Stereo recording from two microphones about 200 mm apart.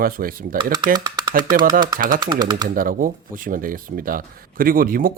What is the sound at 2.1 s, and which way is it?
Speech, 20° right (ahead or behind).